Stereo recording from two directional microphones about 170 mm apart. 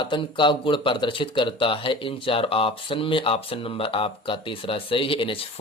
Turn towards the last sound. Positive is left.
turn(degrees=30)  # may be behind; listen again after turning